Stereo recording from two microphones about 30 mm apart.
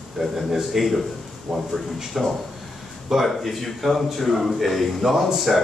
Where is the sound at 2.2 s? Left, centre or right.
Centre.